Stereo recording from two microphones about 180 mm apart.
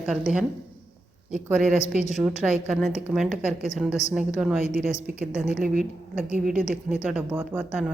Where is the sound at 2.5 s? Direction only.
5° right (ahead or behind).